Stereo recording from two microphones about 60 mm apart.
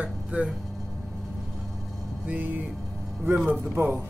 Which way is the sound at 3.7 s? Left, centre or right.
Right.